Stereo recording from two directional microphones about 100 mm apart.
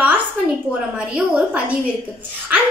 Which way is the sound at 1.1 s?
10° right (ahead or behind).